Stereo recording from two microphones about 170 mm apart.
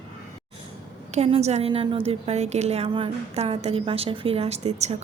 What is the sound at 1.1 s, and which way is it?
A woman's voice, 40° right (ahead or behind).